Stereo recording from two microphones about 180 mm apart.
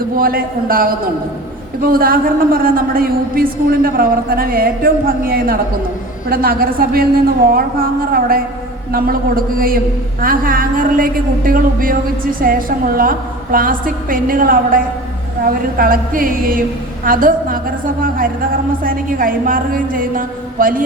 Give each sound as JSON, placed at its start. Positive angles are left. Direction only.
{"t": 0.2, "sound": "a man's voice", "side_deg": -55}
{"t": 18.8, "sound": "a man's voice", "side_deg": -50}